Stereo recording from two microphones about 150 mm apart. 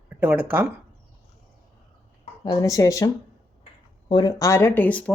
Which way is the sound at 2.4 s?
25° left (ahead or behind).